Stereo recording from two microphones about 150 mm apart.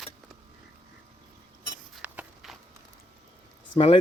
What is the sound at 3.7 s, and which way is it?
Speech, 40° left (ahead or behind).